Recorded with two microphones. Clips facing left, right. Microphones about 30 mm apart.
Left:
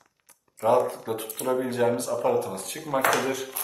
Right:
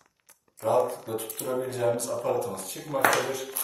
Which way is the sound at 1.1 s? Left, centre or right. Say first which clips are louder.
Left 4 dB; left.